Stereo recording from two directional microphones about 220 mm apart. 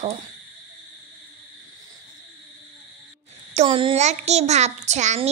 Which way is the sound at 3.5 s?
25° right (ahead or behind).